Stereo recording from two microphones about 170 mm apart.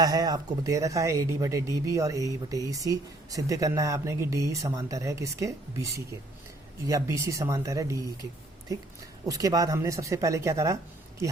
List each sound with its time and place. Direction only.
0.0 s speech: 20° right (ahead or behind)
9.2 s speech: 20° right (ahead or behind)